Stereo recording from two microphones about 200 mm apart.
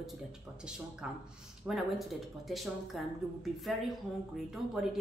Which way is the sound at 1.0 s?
5° right (ahead or behind).